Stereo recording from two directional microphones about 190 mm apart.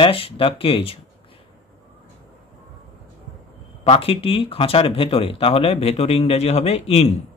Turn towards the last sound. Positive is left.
turn(degrees=35)  # may be behind; listen again after turning